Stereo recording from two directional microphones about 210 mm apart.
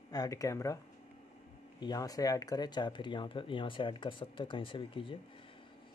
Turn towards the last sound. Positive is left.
turn(degrees=25)  # may be behind; listen again after turning